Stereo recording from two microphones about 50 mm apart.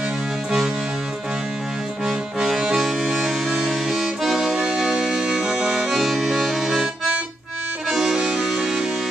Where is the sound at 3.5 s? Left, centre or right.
Centre.